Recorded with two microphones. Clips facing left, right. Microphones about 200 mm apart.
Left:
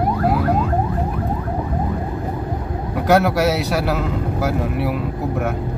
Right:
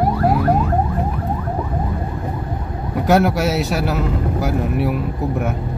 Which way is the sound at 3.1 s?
Centre (ahead or behind).